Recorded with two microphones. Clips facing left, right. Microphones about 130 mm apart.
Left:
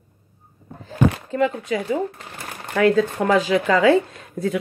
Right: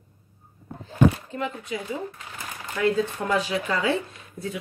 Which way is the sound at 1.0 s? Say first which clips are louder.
Left 6 dB; 90° left.